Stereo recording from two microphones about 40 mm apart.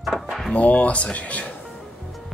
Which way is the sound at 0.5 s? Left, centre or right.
Left.